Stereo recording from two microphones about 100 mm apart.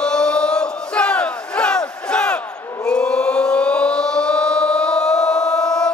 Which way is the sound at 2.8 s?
10° left (ahead or behind).